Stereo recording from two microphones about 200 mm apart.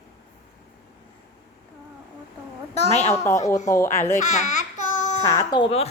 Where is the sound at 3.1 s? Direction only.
15° left (ahead or behind).